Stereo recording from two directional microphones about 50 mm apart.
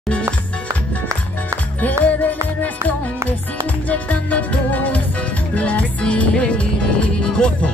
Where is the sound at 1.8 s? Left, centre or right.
Left.